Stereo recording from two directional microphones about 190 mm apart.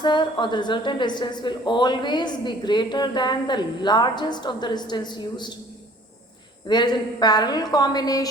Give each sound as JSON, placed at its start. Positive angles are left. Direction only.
{"t": 0.0, "sound": "a woman's voice", "side_deg": 25}
{"t": 6.7, "sound": "a woman's voice", "side_deg": 20}